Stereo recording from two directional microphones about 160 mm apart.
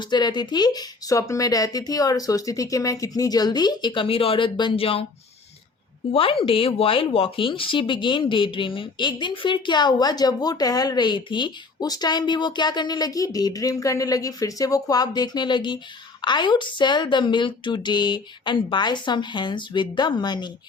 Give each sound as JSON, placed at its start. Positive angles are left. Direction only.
{"t": 0.0, "sound": "speech", "side_deg": 25}
{"t": 6.4, "sound": "speech", "side_deg": 35}